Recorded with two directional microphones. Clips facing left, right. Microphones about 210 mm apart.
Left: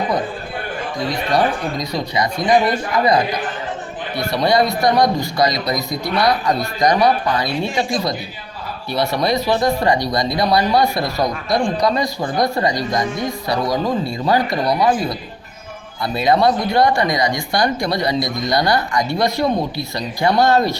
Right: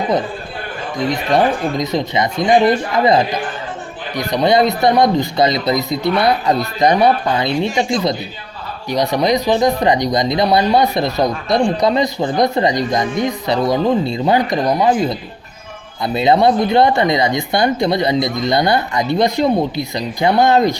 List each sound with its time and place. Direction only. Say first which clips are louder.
0.9 s speech: right 3 dB; 20° right (ahead or behind)